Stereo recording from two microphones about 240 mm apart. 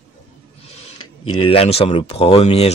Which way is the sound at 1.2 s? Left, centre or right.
Left.